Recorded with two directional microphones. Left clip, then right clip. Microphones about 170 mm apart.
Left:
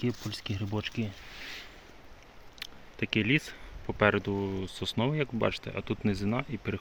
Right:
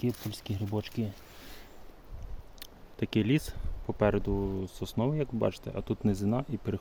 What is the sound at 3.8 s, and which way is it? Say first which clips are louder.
Speech: left 2 dB; 20° right (ahead or behind).